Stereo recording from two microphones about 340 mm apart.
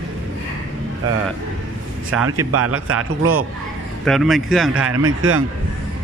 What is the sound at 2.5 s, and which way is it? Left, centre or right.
Speech, right.